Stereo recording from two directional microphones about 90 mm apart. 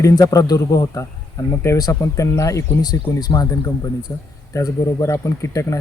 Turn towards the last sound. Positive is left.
turn(degrees=30)  # may be behind; listen again after turning